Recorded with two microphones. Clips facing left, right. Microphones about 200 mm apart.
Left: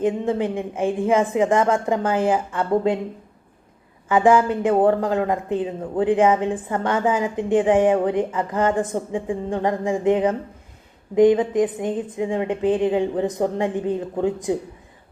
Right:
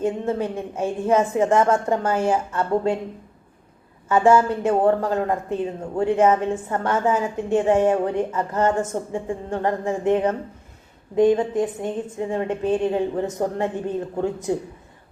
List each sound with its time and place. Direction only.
0.0 s a woman's voice: 15° left (ahead or behind)
4.1 s a woman's voice: 15° left (ahead or behind)